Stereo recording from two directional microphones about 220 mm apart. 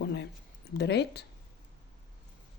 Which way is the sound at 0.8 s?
50° left (ahead or behind).